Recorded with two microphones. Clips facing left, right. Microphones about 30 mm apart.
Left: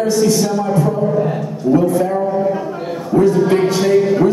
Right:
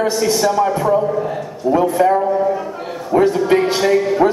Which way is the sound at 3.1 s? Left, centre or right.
Right.